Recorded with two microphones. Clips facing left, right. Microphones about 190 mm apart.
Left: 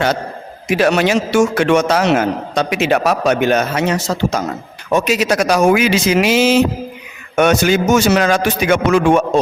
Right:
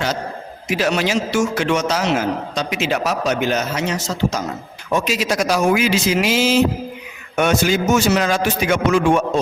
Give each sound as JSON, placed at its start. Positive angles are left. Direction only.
{"t": 0.8, "sound": "a man's voice", "side_deg": 60}
{"t": 4.9, "sound": "a man's voice", "side_deg": 65}